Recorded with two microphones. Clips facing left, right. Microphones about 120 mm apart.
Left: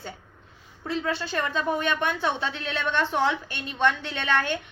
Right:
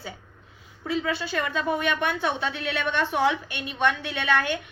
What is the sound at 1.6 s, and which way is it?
A woman's voice, 10° right (ahead or behind).